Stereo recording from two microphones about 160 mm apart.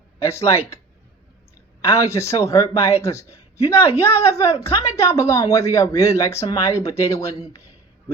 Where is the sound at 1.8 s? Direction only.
15° left (ahead or behind).